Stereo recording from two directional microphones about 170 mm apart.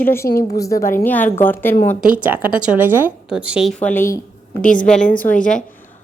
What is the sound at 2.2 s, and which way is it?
A woman's voice, 10° right (ahead or behind).